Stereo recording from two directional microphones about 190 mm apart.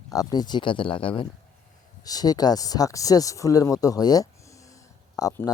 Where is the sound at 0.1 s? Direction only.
20° left (ahead or behind).